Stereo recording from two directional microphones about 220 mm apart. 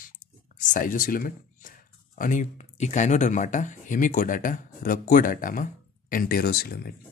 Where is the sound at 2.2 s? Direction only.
35° left (ahead or behind).